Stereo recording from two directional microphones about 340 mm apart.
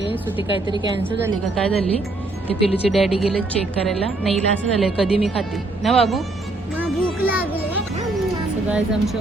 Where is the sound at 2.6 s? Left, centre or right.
Centre.